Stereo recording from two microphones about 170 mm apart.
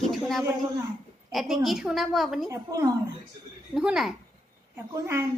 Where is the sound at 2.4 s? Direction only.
20° right (ahead or behind).